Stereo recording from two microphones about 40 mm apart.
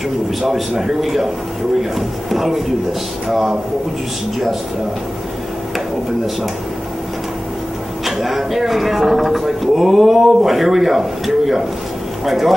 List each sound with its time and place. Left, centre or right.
0.4 s a man's voice: centre
8.0 s a man's voice: centre